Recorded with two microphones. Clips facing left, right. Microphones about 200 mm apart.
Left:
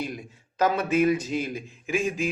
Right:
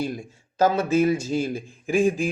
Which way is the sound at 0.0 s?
30° right (ahead or behind).